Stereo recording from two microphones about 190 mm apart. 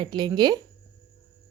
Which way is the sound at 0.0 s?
25° right (ahead or behind).